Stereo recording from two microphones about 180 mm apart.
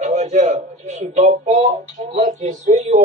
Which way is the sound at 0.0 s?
40° right (ahead or behind).